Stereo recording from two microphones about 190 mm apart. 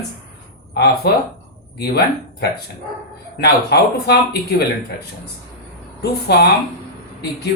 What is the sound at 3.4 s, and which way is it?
Speech, 60° left (ahead or behind).